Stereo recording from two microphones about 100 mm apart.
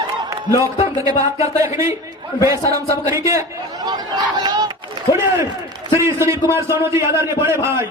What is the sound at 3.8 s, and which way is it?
Chatter, 40° right (ahead or behind).